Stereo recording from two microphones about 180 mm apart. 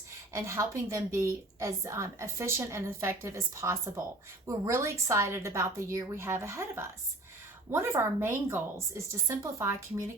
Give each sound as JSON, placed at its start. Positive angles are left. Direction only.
{"t": 0.3, "sound": "a woman's voice", "side_deg": -15}